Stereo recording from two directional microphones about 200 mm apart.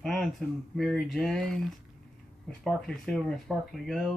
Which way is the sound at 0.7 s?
Centre (ahead or behind).